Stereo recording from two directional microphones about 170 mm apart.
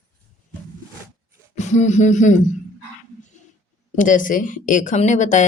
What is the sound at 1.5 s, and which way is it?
Speech, 40° left (ahead or behind).